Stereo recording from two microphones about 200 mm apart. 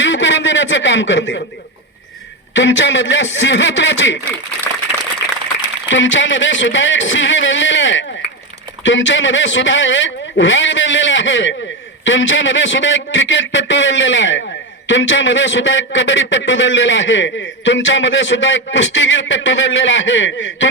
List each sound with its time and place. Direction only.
0.0 s a man's voice: 65° left (ahead or behind)
2.5 s a man's voice: 65° left (ahead or behind)
5.9 s a man's voice: 65° left (ahead or behind)